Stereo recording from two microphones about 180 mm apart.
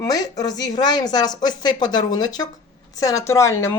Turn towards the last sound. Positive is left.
turn(degrees=15)  # may be behind; listen again after turning